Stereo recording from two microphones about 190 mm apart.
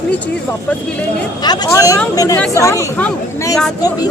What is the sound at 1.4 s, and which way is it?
Speech, 20° left (ahead or behind).